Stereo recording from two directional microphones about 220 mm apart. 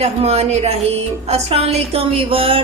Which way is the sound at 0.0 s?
30° right (ahead or behind).